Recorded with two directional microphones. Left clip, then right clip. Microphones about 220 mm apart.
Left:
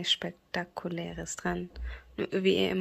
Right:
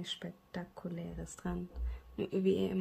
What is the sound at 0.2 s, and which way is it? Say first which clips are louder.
Speech: left 10 dB; 25° left (ahead or behind).